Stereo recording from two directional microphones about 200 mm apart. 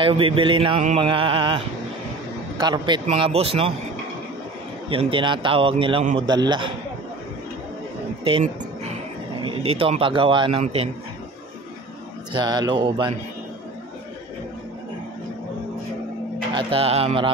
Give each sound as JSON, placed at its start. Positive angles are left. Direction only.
{"t": 0.0, "sound": "speech", "side_deg": -25}
{"t": 4.8, "sound": "speech", "side_deg": -25}
{"t": 8.2, "sound": "a sound", "side_deg": -25}
{"t": 9.8, "sound": "a man's voice", "side_deg": -25}
{"t": 12.3, "sound": "speech", "side_deg": -20}
{"t": 16.5, "sound": "speech", "side_deg": -30}